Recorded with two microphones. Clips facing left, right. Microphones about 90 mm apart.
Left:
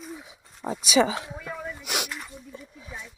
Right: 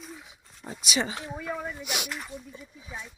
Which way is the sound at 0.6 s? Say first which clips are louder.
Left 9 dB; 85° left.